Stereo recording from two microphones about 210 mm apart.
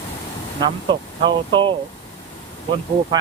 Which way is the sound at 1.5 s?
25° right (ahead or behind).